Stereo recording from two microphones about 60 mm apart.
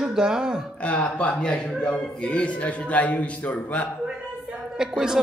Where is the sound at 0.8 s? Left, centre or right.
Left.